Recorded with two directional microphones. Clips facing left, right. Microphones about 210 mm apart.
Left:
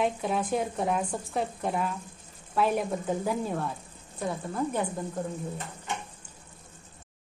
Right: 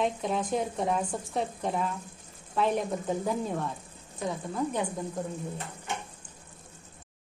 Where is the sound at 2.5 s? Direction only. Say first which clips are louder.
Left 1 dB; 5° left (ahead or behind).